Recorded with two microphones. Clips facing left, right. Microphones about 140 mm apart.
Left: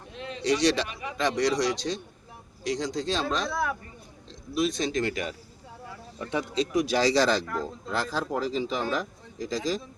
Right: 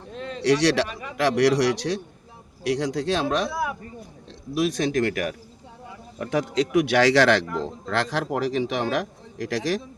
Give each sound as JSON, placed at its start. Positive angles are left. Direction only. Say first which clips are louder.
{"t": 0.1, "sound": "a sound", "louder": "right 4 dB", "side_deg": -45}
{"t": 0.4, "sound": "speech", "louder": "right 4 dB", "side_deg": -75}
{"t": 3.5, "sound": "speech", "louder": "right 1 dB", "side_deg": -15}
{"t": 4.8, "sound": "speech", "louder": "right 5 dB", "side_deg": -65}
{"t": 6.1, "sound": "a man's voice", "louder": "right 5 dB", "side_deg": -85}